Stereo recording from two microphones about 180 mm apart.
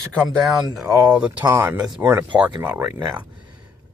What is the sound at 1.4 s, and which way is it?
Speech, 20° right (ahead or behind).